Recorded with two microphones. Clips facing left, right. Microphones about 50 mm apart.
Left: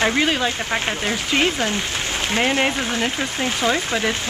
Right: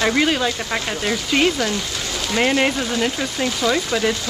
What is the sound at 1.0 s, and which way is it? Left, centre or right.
Speech, left.